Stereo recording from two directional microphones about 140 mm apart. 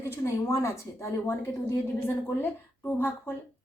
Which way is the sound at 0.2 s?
20° left (ahead or behind).